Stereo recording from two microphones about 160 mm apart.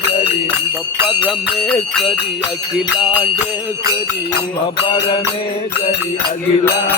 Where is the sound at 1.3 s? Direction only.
5° left (ahead or behind).